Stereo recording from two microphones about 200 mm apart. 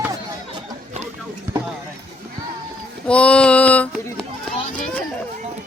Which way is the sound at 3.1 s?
5° left (ahead or behind).